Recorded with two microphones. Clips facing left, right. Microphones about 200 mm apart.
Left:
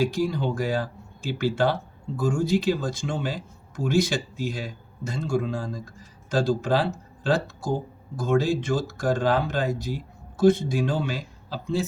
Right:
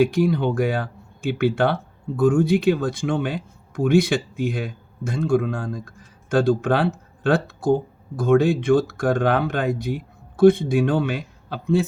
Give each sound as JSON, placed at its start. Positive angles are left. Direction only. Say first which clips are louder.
{"t": 0.0, "sound": "speech", "louder": "right 6 dB", "side_deg": -60}